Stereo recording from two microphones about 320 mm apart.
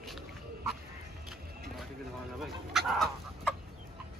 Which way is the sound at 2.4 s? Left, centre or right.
Centre.